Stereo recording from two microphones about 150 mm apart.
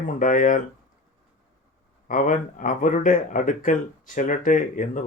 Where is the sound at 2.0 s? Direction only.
60° left (ahead or behind).